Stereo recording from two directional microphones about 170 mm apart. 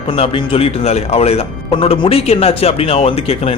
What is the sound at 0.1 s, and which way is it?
Speech, 30° left (ahead or behind).